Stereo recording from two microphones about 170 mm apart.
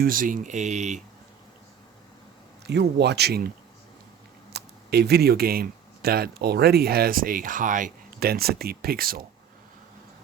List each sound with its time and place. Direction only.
0.0 s speech: 55° right (ahead or behind)
2.6 s speech: 80° right
4.5 s speech: 75° right (ahead or behind)